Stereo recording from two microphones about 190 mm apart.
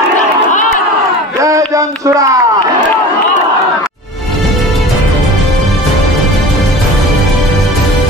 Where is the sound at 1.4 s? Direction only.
15° right (ahead or behind).